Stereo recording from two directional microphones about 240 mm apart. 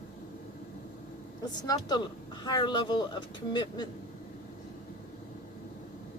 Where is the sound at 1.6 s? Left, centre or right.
Centre.